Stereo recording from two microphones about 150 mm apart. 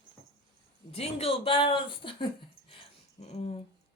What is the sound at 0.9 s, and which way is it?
Speech, 40° left (ahead or behind).